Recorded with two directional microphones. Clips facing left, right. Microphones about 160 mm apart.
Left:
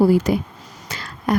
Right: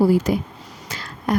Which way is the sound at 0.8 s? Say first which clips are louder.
Left 2 dB; 65° left (ahead or behind).